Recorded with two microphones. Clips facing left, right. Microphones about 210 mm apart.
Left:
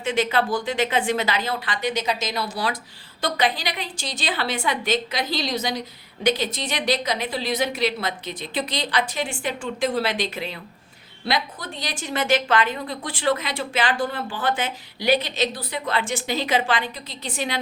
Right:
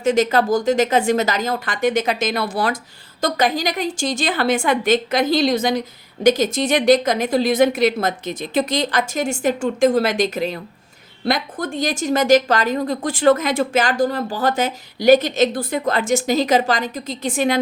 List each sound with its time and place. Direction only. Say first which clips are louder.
0.0 s a woman's voice: right 6 dB; 40° right (ahead or behind)